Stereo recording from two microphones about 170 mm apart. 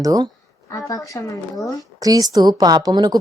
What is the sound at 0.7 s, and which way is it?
Speech, 20° left (ahead or behind).